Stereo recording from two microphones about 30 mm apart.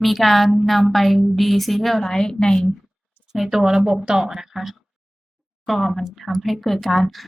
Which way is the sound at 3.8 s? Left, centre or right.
Right.